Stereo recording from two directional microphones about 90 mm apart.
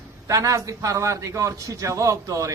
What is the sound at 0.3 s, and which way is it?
A man's voice, 35° right (ahead or behind).